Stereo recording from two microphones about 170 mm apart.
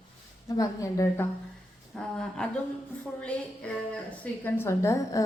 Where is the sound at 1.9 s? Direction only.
5° left (ahead or behind).